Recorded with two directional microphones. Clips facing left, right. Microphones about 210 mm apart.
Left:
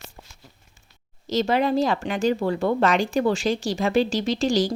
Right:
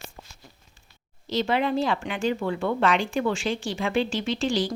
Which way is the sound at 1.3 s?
40° left (ahead or behind).